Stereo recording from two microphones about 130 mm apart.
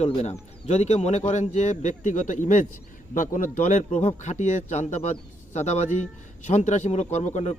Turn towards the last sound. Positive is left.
turn(degrees=60)  # may be behind; listen again after turning